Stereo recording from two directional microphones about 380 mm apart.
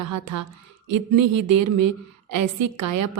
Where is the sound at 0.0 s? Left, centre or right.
Right.